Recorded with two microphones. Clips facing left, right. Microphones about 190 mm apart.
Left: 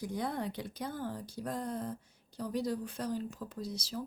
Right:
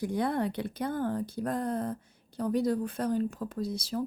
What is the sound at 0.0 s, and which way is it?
Speech, 65° right (ahead or behind).